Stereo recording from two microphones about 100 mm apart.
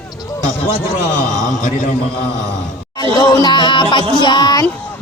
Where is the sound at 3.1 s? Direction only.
45° left (ahead or behind).